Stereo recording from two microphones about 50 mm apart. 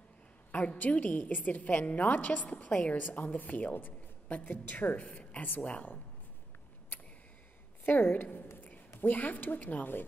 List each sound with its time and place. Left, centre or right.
0.5 s a woman's voice: left
7.8 s a sound: left
8.9 s speech: left